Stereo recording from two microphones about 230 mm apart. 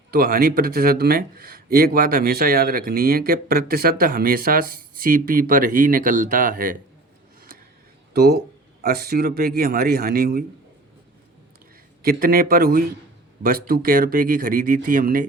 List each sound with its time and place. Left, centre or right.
0.1 s speech: right
8.1 s speech: right
12.0 s speech: right